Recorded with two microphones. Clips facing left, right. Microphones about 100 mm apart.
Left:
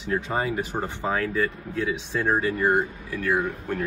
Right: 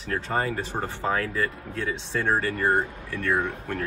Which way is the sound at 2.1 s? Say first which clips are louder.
Left 1 dB; 10° left (ahead or behind).